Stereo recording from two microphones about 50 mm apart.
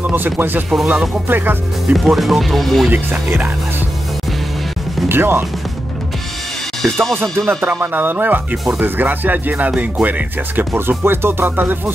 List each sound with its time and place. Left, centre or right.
0.0 s speech: right
2.0 s speech: centre
2.9 s speech: right
5.0 s speech: right
6.8 s speech: centre
7.2 s speech: right